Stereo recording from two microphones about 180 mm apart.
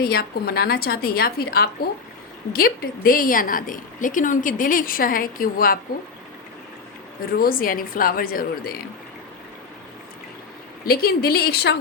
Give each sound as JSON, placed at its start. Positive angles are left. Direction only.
{"t": 0.0, "sound": "a woman's voice", "side_deg": 55}
{"t": 7.3, "sound": "a woman's voice", "side_deg": 55}
{"t": 10.8, "sound": "a woman's voice", "side_deg": 60}